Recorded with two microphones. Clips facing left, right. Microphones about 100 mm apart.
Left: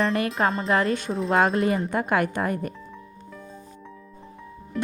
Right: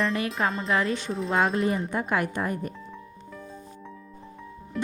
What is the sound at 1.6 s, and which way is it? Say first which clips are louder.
Speech: left 3 dB; 80° left.